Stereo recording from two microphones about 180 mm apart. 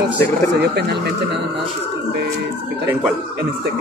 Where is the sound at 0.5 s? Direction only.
65° right (ahead or behind).